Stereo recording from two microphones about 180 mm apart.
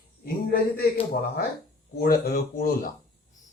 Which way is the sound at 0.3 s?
55° left (ahead or behind).